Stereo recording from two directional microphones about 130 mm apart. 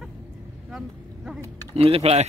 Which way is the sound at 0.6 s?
5° right (ahead or behind).